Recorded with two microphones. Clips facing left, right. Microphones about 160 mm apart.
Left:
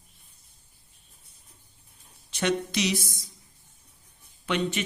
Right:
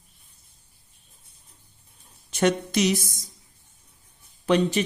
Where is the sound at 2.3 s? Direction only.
45° right (ahead or behind).